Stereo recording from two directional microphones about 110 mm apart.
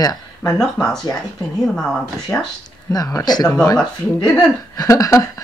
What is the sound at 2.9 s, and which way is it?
Speech, 35° left (ahead or behind).